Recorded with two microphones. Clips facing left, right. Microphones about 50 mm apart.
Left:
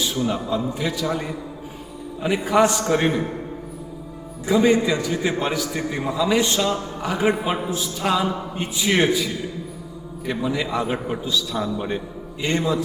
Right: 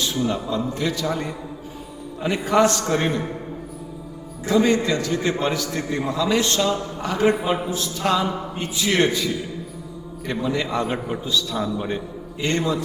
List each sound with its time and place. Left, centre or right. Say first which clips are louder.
0.0 s a man's voice: even; centre
4.4 s a man's voice: left 1 dB; centre